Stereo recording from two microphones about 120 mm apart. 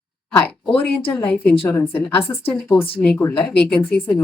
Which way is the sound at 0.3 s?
10° left (ahead or behind).